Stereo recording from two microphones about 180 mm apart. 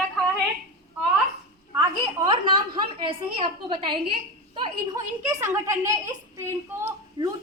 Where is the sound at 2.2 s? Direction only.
25° right (ahead or behind).